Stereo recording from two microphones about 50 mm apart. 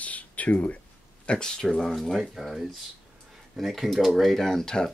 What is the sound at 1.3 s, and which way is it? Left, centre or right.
Speech, centre.